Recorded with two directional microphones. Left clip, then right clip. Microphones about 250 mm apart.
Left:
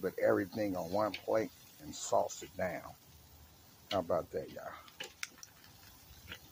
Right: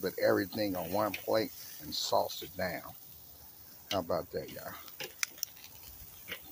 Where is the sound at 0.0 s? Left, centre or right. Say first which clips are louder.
Right 2 dB; centre.